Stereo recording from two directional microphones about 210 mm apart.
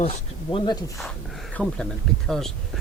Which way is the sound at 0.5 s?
20° left (ahead or behind).